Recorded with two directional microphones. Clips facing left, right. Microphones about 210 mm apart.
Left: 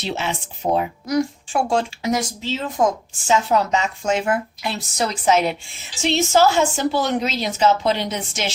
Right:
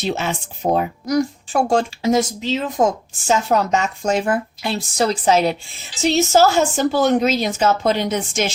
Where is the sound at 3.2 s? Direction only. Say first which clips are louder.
Right 1 dB; 45° right (ahead or behind).